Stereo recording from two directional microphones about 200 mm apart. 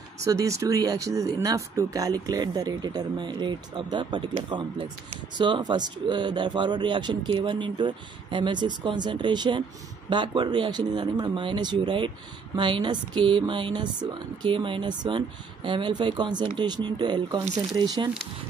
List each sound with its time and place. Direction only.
0.2 s speech: 15° right (ahead or behind)